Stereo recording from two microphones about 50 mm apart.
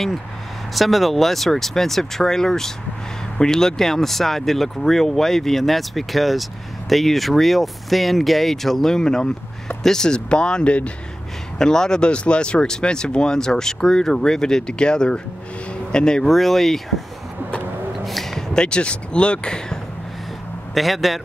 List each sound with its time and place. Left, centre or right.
0.7 s speech: centre; by 10.9 s left
11.5 s speech: centre
16.3 s speech: centre
17.9 s a sound: centre
20.7 s speech: centre